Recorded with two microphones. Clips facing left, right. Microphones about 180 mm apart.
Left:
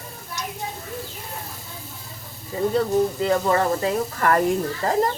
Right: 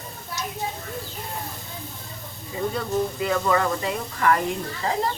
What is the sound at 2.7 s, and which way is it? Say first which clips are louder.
Speech: left 6 dB; 35° left (ahead or behind).